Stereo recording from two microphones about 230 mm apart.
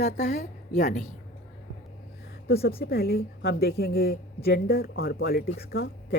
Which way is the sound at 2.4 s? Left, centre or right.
Left.